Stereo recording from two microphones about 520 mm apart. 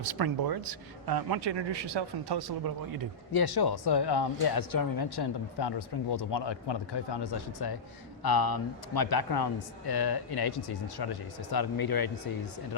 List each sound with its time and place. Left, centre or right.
0.0 s a man's voice: right
3.3 s speech: left